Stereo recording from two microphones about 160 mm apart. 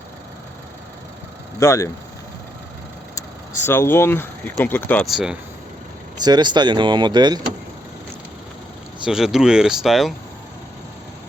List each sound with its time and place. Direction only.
1.5 s speech: 20° left (ahead or behind)
3.2 s speech: 15° left (ahead or behind)
5.0 s speech: centre (ahead or behind)
6.1 s speech: 25° right (ahead or behind)
9.0 s speech: 5° right (ahead or behind)